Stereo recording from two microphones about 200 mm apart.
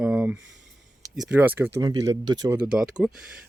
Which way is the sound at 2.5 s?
5° right (ahead or behind).